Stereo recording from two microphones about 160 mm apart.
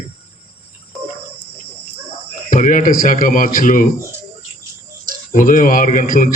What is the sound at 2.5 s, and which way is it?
A man's voice, 55° left (ahead or behind).